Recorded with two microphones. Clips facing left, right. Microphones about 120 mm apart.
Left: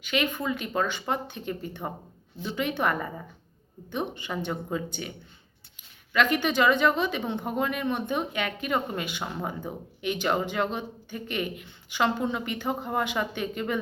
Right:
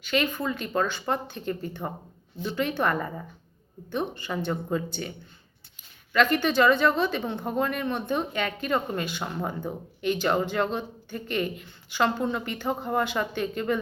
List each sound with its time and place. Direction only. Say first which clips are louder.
0.0 s speech: right 1 dB; 10° left (ahead or behind)
6.1 s speech: right 2 dB; 15° left (ahead or behind)